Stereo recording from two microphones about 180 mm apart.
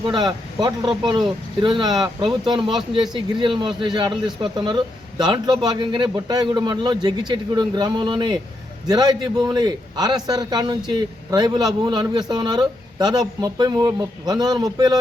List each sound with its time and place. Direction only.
0.0 s a man's voice: 25° right (ahead or behind)